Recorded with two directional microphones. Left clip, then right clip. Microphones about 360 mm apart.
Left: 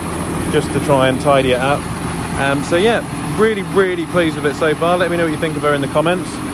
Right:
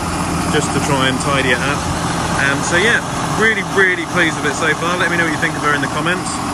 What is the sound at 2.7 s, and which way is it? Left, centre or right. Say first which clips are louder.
Speech: even; centre.